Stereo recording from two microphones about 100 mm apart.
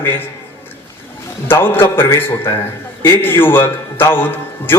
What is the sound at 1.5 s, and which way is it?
A man's voice, 20° left (ahead or behind).